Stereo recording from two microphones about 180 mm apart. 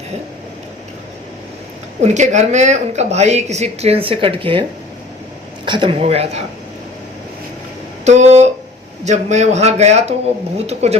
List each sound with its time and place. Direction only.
2.0 s speech: 40° right (ahead or behind)
5.6 s speech: 25° right (ahead or behind)
8.0 s speech: 40° right (ahead or behind)